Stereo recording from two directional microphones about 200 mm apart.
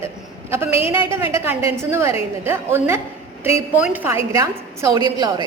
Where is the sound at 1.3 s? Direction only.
15° right (ahead or behind).